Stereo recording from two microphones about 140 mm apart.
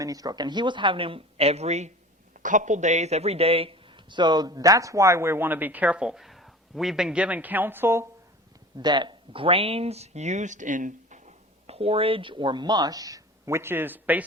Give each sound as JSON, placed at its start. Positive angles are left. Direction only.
{"t": 0.0, "sound": "speech", "side_deg": -25}
{"t": 2.4, "sound": "speech", "side_deg": -65}
{"t": 8.8, "sound": "speech", "side_deg": -30}